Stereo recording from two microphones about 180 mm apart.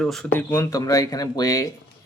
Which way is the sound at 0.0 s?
Centre (ahead or behind).